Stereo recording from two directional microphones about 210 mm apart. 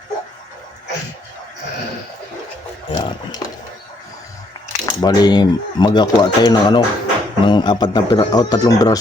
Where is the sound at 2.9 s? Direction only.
25° left (ahead or behind).